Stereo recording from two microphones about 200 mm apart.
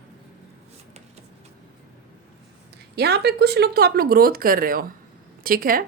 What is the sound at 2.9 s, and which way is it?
Speech, 55° right (ahead or behind).